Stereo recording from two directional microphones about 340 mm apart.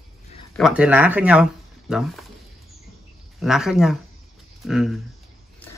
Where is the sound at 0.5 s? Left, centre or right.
Centre.